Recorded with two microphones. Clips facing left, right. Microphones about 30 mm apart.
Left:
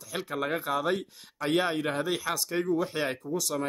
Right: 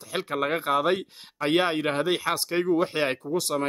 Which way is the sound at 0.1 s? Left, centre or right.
Right.